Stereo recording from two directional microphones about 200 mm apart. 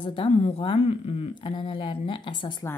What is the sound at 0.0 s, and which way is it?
Speech, 25° left (ahead or behind).